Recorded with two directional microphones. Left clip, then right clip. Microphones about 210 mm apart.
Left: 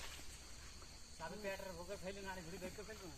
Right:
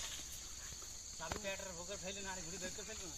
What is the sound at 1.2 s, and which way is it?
Speech, 10° left (ahead or behind).